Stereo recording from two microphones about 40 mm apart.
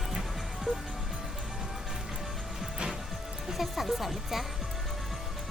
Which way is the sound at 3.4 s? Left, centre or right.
Centre.